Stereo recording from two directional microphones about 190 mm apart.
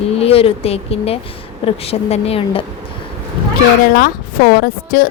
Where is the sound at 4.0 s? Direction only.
50° left (ahead or behind).